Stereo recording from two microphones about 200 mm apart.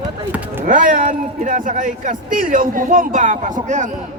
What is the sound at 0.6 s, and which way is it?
Speech, 40° right (ahead or behind).